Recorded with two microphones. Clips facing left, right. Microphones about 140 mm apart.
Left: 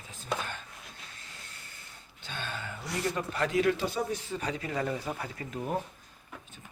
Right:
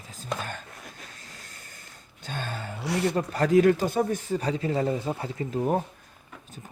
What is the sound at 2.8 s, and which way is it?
Speech, 70° right (ahead or behind).